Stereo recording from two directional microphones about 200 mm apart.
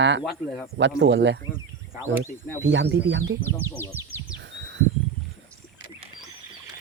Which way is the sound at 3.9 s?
10° right (ahead or behind).